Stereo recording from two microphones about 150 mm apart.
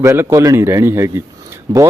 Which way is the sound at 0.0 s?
20° right (ahead or behind).